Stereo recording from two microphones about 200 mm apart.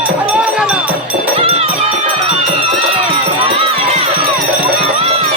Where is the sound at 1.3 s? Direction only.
30° right (ahead or behind).